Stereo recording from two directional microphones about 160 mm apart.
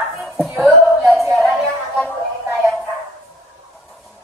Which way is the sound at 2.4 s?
15° right (ahead or behind).